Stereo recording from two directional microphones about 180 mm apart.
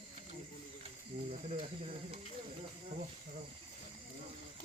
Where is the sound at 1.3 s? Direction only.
35° right (ahead or behind).